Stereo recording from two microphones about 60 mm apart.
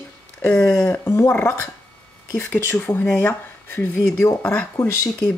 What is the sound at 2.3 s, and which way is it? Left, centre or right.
Speech, left.